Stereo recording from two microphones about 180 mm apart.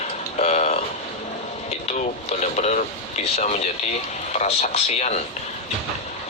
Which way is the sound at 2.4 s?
40° left (ahead or behind).